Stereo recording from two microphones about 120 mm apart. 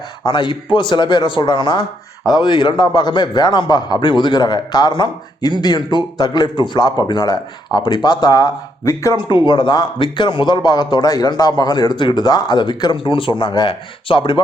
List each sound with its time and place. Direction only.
0.3 s a man's voice: 40° left (ahead or behind)
9.5 s a man's voice: 40° left (ahead or behind)